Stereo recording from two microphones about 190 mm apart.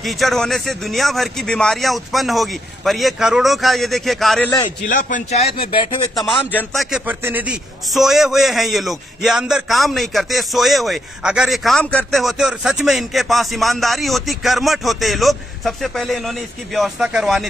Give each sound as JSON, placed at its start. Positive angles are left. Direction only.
{"t": 0.0, "sound": "a man's voice", "side_deg": 0}
{"t": 4.8, "sound": "speech", "side_deg": 45}
{"t": 6.1, "sound": "a man's voice", "side_deg": 0}